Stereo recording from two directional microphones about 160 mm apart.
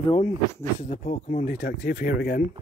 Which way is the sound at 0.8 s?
50° left (ahead or behind).